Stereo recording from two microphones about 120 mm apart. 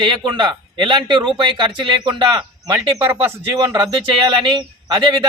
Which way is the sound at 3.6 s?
40° right (ahead or behind).